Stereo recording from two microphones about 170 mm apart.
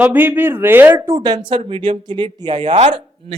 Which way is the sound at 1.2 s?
25° right (ahead or behind).